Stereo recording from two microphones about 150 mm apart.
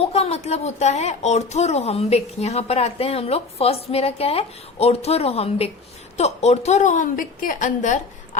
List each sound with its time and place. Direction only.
0.0 s a woman's voice: 45° left (ahead or behind)